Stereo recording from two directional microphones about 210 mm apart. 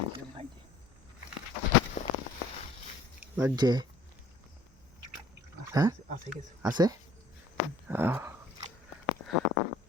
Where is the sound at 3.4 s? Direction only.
15° right (ahead or behind).